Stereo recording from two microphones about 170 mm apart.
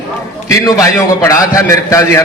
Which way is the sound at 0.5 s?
20° left (ahead or behind).